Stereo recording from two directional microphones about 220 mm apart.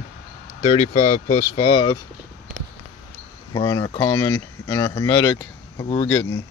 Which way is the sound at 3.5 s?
20° left (ahead or behind).